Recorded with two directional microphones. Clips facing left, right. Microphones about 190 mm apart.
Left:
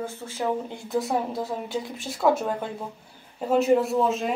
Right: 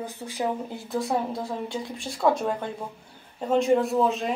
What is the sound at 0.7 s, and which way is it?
Speech, centre (ahead or behind).